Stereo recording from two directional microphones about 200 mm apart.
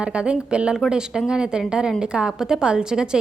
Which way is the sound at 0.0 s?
5° right (ahead or behind).